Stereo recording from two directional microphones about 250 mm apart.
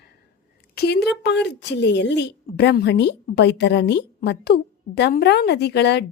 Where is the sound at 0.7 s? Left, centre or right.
Left.